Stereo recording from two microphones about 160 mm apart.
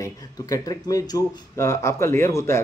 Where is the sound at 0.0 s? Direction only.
20° left (ahead or behind).